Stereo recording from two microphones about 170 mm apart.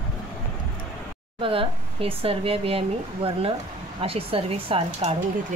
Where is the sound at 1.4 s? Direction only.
30° right (ahead or behind).